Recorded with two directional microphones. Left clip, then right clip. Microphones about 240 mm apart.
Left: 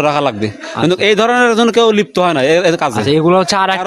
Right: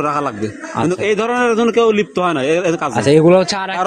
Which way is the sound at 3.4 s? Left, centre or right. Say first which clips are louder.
Left 4 dB; left.